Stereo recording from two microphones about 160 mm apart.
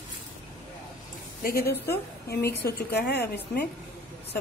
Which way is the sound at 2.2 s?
90° left.